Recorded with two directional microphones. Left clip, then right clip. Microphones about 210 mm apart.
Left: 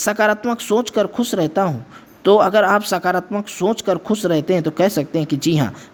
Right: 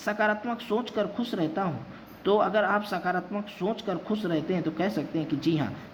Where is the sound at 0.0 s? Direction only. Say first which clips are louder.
Left 10 dB; 55° left (ahead or behind).